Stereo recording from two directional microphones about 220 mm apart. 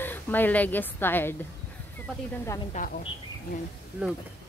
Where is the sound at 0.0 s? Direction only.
10° left (ahead or behind).